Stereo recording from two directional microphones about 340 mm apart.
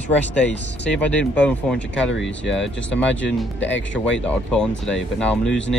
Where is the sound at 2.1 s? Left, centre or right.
Left.